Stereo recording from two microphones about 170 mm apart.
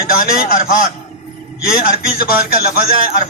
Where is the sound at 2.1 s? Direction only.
60° left (ahead or behind).